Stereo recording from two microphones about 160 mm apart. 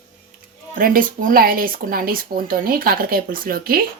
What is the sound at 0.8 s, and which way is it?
Speech, 60° right (ahead or behind).